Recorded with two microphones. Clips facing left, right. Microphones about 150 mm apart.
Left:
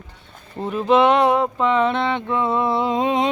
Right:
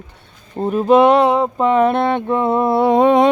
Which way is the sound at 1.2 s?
25° right (ahead or behind).